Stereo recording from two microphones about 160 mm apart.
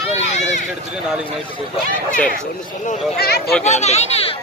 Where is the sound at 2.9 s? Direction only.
70° left (ahead or behind).